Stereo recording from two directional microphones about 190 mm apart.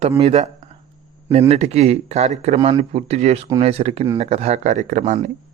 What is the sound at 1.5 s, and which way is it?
Speech, 35° right (ahead or behind).